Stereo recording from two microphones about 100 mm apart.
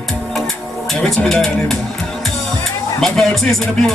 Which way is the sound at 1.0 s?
5° left (ahead or behind).